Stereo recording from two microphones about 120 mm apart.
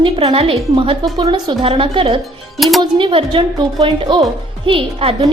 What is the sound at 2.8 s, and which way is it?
A woman's voice, 45° right (ahead or behind).